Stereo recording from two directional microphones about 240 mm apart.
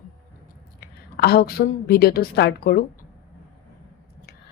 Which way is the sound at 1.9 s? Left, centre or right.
Left.